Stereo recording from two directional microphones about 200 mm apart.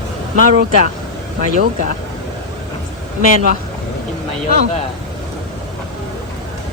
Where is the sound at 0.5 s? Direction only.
50° right (ahead or behind).